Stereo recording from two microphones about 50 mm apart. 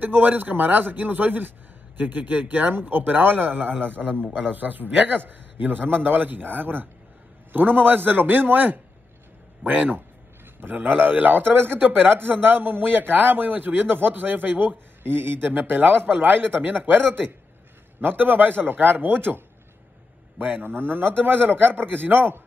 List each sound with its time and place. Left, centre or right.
0.0 s a man's voice: right